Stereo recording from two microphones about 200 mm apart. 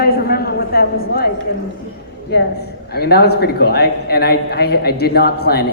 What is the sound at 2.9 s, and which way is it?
A man's voice, 55° left (ahead or behind).